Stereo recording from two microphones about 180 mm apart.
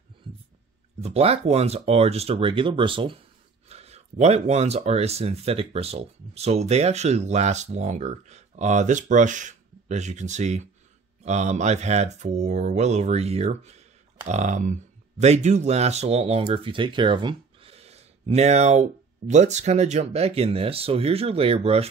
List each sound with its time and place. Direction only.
1.0 s speech: 35° right (ahead or behind)